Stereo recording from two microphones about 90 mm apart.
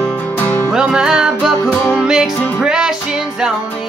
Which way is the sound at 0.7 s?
10° right (ahead or behind).